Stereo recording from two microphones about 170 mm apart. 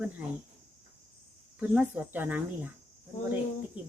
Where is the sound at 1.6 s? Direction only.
5° right (ahead or behind).